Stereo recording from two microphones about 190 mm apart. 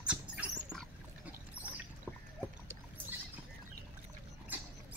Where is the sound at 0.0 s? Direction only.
5° right (ahead or behind).